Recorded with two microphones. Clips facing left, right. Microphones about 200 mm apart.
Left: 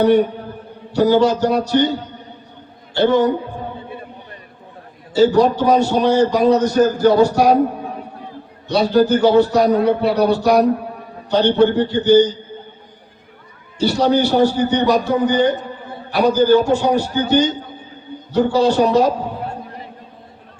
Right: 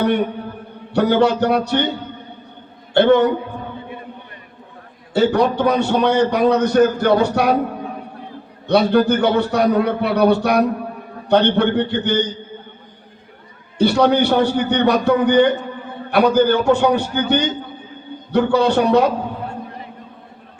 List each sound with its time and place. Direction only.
0.0 s a man's voice: 60° right (ahead or behind)
2.9 s a man's voice: 60° right (ahead or behind)
5.1 s a man's voice: 60° right (ahead or behind)
8.6 s a man's voice: 60° right (ahead or behind)
13.7 s a man's voice: 60° right (ahead or behind)